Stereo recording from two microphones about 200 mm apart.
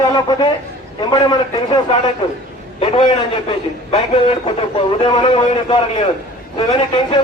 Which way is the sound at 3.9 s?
25° left (ahead or behind).